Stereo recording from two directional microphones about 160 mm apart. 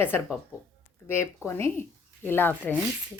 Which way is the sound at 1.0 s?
15° left (ahead or behind).